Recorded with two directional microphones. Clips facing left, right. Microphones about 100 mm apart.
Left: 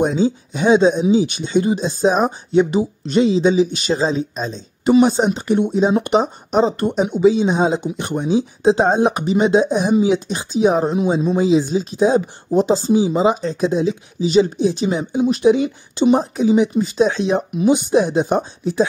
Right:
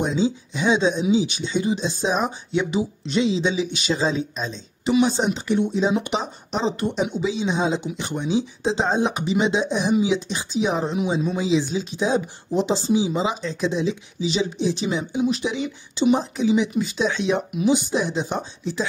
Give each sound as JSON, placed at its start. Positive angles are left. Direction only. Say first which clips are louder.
{"t": 0.0, "sound": "speech", "louder": "left 5 dB", "side_deg": 50}
{"t": 17.6, "sound": "speech", "louder": "left 6 dB", "side_deg": 55}